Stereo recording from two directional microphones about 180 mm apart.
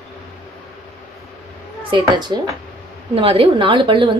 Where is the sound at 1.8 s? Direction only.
25° right (ahead or behind).